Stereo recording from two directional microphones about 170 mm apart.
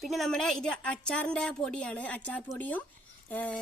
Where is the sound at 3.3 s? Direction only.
10° left (ahead or behind).